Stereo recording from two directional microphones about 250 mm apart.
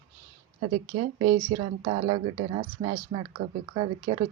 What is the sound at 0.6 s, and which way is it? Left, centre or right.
A woman's voice, right.